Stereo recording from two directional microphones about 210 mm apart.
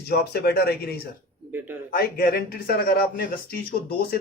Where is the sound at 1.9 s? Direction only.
45° left (ahead or behind).